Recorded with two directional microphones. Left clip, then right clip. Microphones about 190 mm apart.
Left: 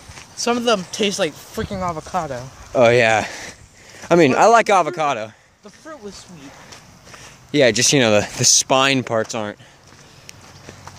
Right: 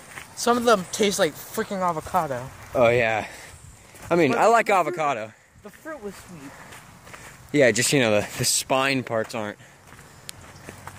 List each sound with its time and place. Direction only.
0.4 s speech: 10° left (ahead or behind); by 2.4 s 5° right (ahead or behind)
2.7 s speech: 30° left (ahead or behind)
7.5 s speech: 10° left (ahead or behind)